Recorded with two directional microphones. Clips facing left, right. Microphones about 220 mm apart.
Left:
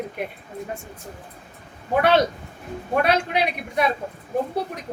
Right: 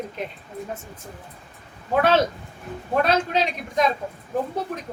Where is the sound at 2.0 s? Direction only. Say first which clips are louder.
Left 1 dB; 15° left (ahead or behind).